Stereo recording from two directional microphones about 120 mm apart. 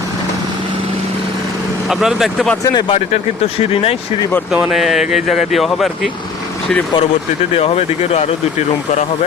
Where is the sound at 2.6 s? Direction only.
40° left (ahead or behind).